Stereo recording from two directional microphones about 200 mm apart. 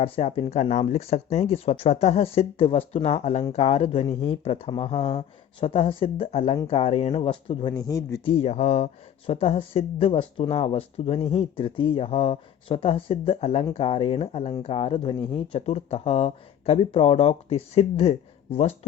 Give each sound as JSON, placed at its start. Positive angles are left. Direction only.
{"t": 0.0, "sound": "speech", "side_deg": 30}
{"t": 8.3, "sound": "speech", "side_deg": 30}